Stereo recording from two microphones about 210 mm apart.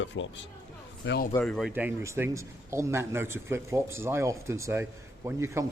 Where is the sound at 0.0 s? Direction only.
60° left (ahead or behind).